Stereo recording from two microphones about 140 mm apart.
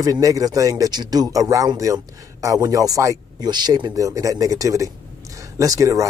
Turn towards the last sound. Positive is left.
turn(degrees=-25)  # may be behind; listen again after turning